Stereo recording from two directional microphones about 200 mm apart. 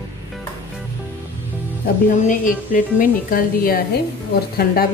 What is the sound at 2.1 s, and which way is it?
Speech, 40° left (ahead or behind).